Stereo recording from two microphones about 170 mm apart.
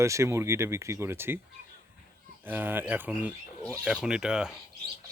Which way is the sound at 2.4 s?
10° right (ahead or behind).